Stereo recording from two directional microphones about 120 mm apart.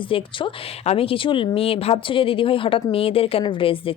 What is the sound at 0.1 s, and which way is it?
A woman's voice, 45° left (ahead or behind).